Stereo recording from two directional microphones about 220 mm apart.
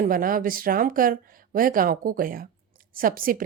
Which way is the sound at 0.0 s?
40° right (ahead or behind).